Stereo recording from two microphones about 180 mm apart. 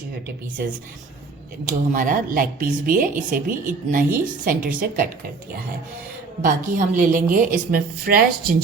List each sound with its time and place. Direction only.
1.6 s speech: 50° right (ahead or behind)
6.4 s speech: 45° right (ahead or behind)